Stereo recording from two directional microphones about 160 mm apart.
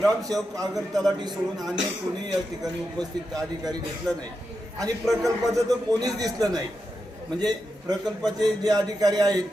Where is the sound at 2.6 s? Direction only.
5° left (ahead or behind).